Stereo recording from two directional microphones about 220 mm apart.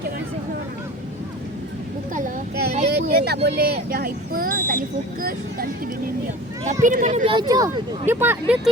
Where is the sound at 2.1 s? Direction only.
40° right (ahead or behind).